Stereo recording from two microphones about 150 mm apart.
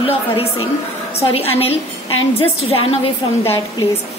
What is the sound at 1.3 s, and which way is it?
A woman's voice, 40° left (ahead or behind).